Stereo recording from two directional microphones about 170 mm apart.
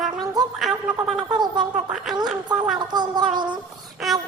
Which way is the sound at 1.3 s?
25° right (ahead or behind).